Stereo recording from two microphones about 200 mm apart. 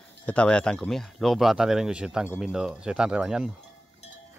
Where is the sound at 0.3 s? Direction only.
5° left (ahead or behind).